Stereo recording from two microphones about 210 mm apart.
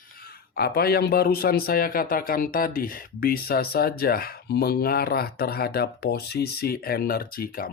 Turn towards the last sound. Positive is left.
turn(degrees=45)  # may be behind; listen again after turning